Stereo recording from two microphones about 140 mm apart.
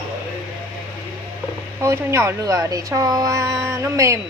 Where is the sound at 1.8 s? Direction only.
20° right (ahead or behind).